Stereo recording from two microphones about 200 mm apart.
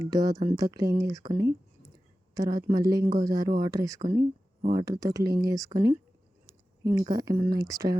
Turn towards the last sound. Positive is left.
turn(degrees=-15)  # may be behind; listen again after turning